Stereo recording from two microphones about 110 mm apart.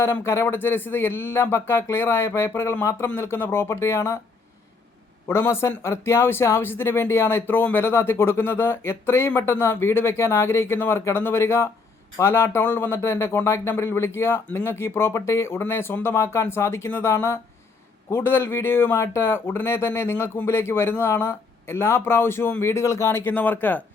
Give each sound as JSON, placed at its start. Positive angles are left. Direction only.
{"t": 0.0, "sound": "speech", "side_deg": 20}
{"t": 5.3, "sound": "speech", "side_deg": 25}